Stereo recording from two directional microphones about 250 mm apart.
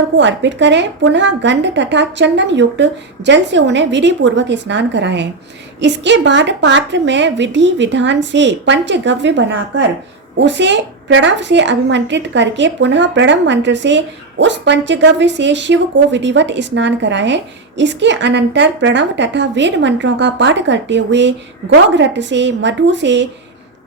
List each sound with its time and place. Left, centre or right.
0.2 s a woman's voice: right